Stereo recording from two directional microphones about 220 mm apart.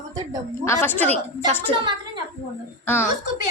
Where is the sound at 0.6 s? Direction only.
10° left (ahead or behind).